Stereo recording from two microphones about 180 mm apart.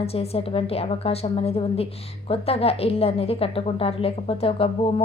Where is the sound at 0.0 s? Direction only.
35° left (ahead or behind).